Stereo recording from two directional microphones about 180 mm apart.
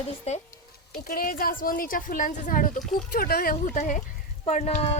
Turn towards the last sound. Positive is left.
turn(degrees=35)  # may be behind; listen again after turning